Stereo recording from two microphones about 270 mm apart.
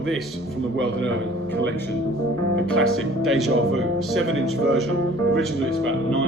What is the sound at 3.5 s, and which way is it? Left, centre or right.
Speech, right.